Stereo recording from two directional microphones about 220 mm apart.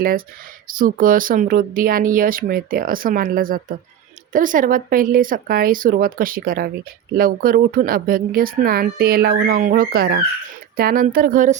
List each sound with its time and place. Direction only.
0.7 s speech: 40° right (ahead or behind)